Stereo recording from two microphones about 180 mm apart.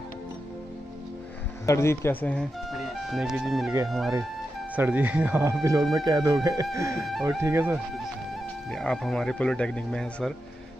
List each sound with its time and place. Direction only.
1.7 s speech: 15° left (ahead or behind); by 3.7 s centre (ahead or behind)
4.7 s speech: 10° right (ahead or behind)
7.0 s speech: centre (ahead or behind)
7.2 s speech: 15° right (ahead or behind)
8.6 s speech: centre (ahead or behind)